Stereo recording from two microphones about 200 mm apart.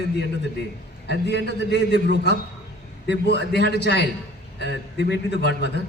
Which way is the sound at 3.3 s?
55° left (ahead or behind).